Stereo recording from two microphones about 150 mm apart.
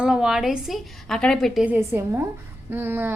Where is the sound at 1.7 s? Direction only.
15° right (ahead or behind).